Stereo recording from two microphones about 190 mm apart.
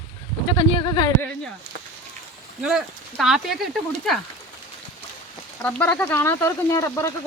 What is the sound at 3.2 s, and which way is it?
Speech, centre (ahead or behind).